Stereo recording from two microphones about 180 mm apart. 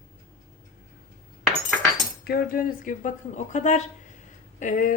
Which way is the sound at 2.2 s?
55° left (ahead or behind).